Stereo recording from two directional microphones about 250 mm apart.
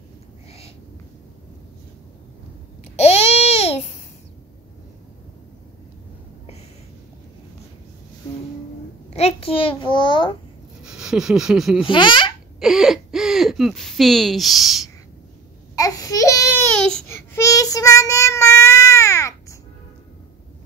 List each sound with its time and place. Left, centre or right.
2.8 s babbling: left
9.1 s a sound: left
10.8 s speech: centre
11.9 s speech: centre
12.5 s a sound: centre
15.7 s babbling: centre